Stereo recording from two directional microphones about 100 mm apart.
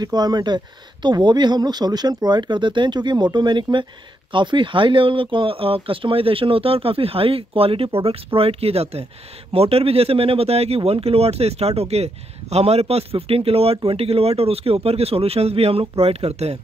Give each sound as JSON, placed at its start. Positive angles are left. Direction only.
{"t": 0.0, "sound": "a man's voice", "side_deg": -40}